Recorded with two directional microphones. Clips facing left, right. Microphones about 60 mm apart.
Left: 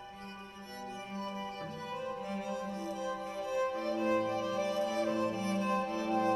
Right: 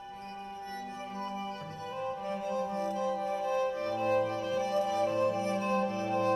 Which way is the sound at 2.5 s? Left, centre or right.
Right.